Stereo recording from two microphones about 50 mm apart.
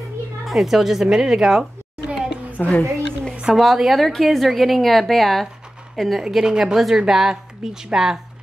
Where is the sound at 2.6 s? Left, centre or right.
Left.